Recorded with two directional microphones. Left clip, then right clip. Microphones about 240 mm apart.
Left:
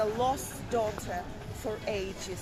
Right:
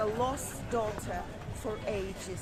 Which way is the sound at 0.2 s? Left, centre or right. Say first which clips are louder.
Left 3 dB; centre.